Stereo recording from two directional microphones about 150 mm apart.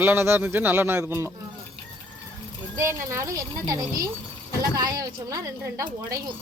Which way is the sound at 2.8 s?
20° right (ahead or behind).